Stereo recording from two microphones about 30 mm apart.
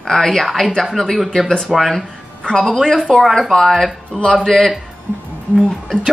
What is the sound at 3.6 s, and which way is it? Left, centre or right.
Speech, centre.